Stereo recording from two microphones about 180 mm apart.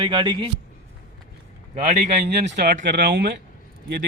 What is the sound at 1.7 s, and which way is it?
Speech, 40° right (ahead or behind).